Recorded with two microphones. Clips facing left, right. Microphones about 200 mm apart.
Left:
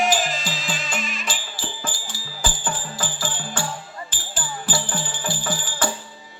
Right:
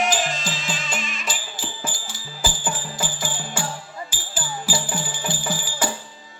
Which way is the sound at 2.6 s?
10° right (ahead or behind).